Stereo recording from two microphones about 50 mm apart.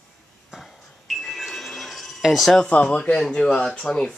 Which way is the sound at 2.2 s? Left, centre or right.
Centre.